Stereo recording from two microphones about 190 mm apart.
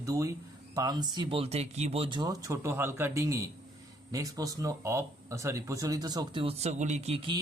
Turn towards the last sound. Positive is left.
turn(degrees=-30)  # may be behind; listen again after turning